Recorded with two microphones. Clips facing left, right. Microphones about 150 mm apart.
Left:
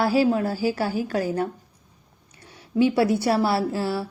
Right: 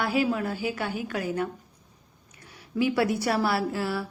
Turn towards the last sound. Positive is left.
turn(degrees=30)  # may be behind; listen again after turning